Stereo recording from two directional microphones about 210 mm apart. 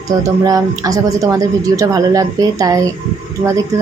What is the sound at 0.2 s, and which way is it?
Speech, 15° right (ahead or behind).